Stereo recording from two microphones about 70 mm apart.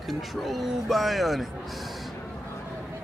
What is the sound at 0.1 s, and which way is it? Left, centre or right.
A man's voice, centre.